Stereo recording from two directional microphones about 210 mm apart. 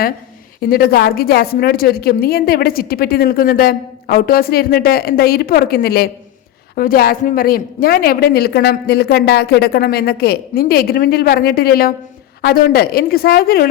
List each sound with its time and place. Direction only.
0.7 s a woman's voice: 45° left (ahead or behind)